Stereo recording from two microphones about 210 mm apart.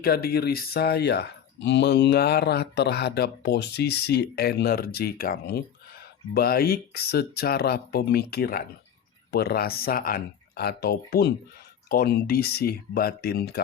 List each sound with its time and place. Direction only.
0.0 s speech: 45° left (ahead or behind)